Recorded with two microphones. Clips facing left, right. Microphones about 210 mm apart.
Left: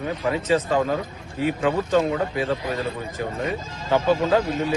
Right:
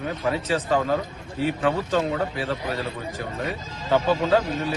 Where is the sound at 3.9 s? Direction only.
15° left (ahead or behind).